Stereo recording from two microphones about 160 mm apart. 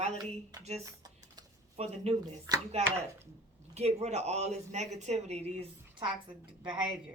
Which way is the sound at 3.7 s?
45° right (ahead or behind).